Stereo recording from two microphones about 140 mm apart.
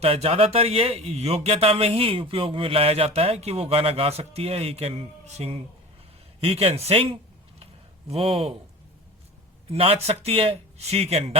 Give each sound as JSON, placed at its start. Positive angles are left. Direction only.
{"t": 0.0, "sound": "a man's voice", "side_deg": -45}
{"t": 9.6, "sound": "a man's voice", "side_deg": -45}